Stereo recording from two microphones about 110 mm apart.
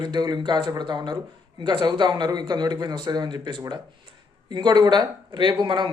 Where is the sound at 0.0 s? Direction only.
40° right (ahead or behind).